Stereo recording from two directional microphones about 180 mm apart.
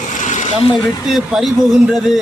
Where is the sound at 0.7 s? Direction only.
Centre (ahead or behind).